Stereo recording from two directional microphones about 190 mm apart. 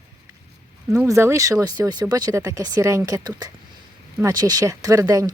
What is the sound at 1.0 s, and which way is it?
Speech, 15° right (ahead or behind).